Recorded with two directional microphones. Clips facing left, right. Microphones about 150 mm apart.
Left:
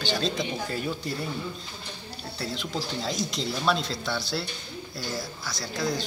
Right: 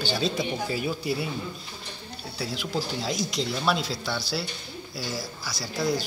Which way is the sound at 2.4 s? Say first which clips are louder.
Right 2 dB; 5° right (ahead or behind).